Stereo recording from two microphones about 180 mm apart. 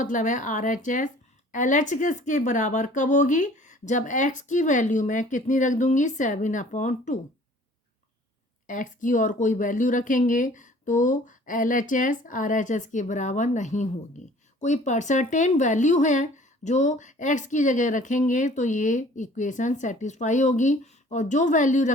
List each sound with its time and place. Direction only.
0.0 s speech: 45° left (ahead or behind)
8.6 s speech: 45° left (ahead or behind)